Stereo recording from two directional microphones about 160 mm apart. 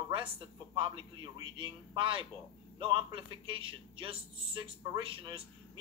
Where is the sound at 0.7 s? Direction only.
30° right (ahead or behind).